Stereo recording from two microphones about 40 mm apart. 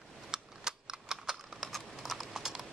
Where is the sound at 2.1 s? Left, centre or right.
Centre.